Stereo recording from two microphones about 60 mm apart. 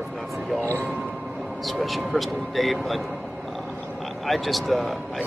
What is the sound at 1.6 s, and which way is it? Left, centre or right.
Speech, centre.